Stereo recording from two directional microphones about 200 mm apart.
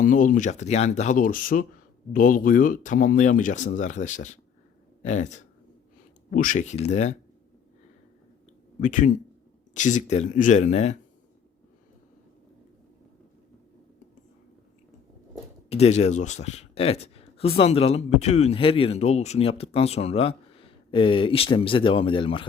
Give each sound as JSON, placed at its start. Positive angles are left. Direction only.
{"t": 0.0, "sound": "speech", "side_deg": 40}
{"t": 6.3, "sound": "speech", "side_deg": 40}
{"t": 8.8, "sound": "speech", "side_deg": 40}
{"t": 15.7, "sound": "speech", "side_deg": 30}